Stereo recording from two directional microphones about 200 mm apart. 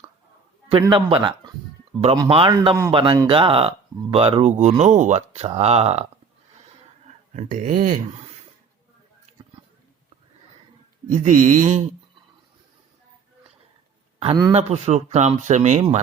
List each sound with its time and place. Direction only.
0.7 s a man's voice: 25° right (ahead or behind)
7.3 s speech: 35° right (ahead or behind)
11.1 s speech: 35° right (ahead or behind)
14.2 s a man's voice: 25° right (ahead or behind)